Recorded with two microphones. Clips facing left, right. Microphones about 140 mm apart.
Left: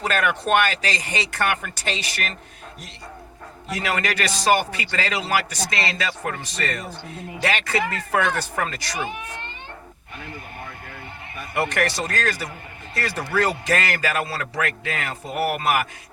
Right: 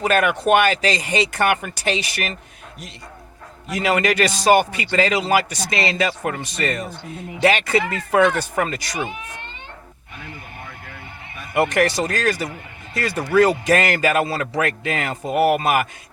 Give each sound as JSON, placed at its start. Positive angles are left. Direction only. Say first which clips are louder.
{"t": 0.0, "sound": "a man's voice", "louder": "right 5 dB", "side_deg": -15}
{"t": 3.7, "sound": "a man's voice", "louder": "right 6 dB", "side_deg": -15}
{"t": 11.5, "sound": "a man's voice", "louder": "right 5 dB", "side_deg": -15}